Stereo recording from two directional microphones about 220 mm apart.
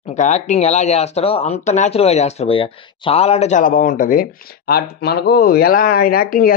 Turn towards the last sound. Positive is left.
turn(degrees=40)  # may be behind; listen again after turning